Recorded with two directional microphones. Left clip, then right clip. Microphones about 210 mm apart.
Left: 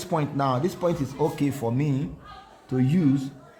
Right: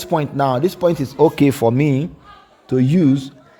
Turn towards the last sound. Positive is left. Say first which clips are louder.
# right 8 dB
turn(degrees=-40)  # may be behind; listen again after turning